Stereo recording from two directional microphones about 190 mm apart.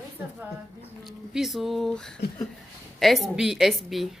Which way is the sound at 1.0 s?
Centre (ahead or behind).